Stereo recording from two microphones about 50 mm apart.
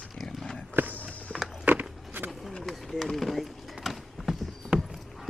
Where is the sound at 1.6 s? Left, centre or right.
Right.